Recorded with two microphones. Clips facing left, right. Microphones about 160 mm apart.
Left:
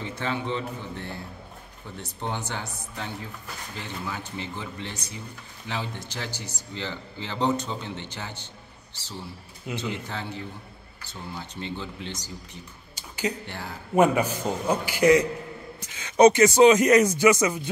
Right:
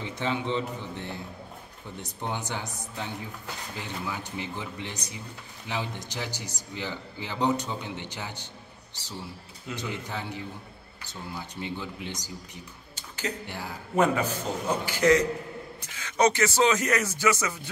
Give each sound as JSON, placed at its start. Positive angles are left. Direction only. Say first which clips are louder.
{"t": 0.0, "sound": "speech", "louder": "even", "side_deg": -15}
{"t": 9.8, "sound": "speech", "louder": "left 2 dB", "side_deg": -15}
{"t": 12.9, "sound": "a sound", "louder": "left 5 dB", "side_deg": 15}
{"t": 13.5, "sound": "speech", "louder": "even", "side_deg": -10}
{"t": 13.9, "sound": "speech", "louder": "left 4 dB", "side_deg": 15}